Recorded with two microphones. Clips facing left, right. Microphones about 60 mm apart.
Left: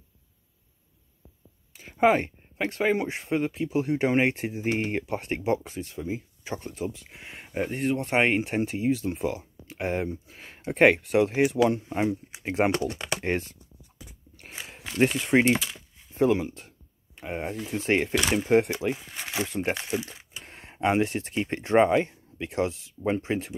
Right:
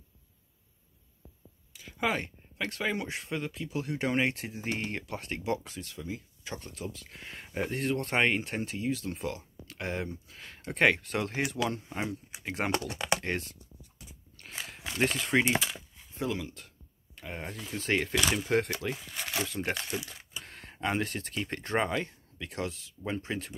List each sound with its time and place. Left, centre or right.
1.7 s speech: left
14.5 s walk: centre
15.0 s speech: centre
16.1 s speech: left
18.1 s speech: centre
18.4 s speech: left